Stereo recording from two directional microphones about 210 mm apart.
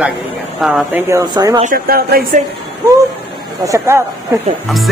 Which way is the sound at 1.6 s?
40° right (ahead or behind).